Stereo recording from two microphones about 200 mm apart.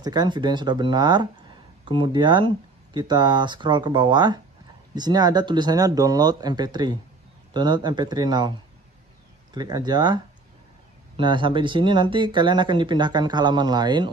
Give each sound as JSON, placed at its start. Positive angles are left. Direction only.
{"t": 0.0, "sound": "speech", "side_deg": -20}